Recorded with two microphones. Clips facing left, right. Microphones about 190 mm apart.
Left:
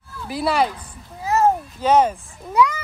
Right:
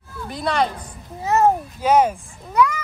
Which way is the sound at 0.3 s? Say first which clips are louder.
Left 2 dB; 5° left (ahead or behind).